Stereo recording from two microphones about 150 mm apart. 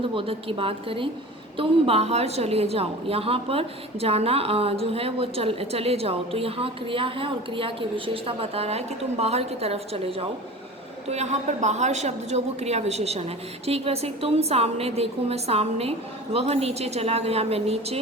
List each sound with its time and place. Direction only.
0.1 s a woman's voice: 35° right (ahead or behind)